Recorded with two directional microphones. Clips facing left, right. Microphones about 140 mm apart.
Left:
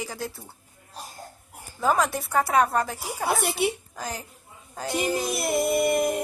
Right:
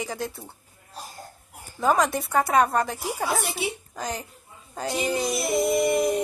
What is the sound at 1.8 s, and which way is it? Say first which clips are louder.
Speech: right 2 dB; centre (ahead or behind).